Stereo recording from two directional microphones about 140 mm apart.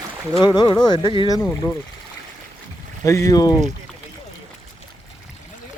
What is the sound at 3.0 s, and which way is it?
Speech, 20° left (ahead or behind).